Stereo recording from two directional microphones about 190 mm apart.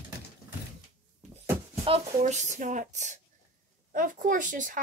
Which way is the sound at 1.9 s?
35° right (ahead or behind).